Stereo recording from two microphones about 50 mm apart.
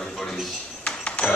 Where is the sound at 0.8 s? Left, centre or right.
Left.